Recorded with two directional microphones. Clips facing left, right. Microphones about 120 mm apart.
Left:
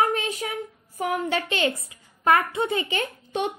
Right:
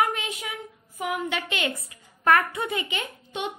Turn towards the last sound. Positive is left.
turn(degrees=40)  # may be behind; listen again after turning